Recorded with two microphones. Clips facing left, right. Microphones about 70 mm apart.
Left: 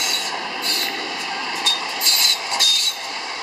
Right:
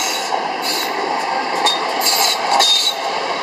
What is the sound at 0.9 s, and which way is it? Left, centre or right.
Train, right.